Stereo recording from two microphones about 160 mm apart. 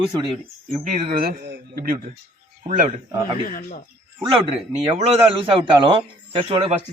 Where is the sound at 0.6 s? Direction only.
50° right (ahead or behind).